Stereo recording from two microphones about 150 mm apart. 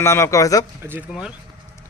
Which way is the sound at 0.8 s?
15° right (ahead or behind).